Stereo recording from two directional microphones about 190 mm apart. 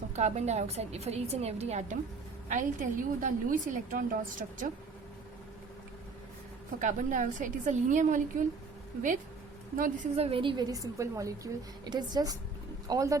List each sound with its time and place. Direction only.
0.2 s a woman's voice: 35° right (ahead or behind)
6.7 s a woman's voice: 40° right (ahead or behind)
9.7 s a woman's voice: 45° right (ahead or behind)
10.2 s a woman's voice: 30° right (ahead or behind)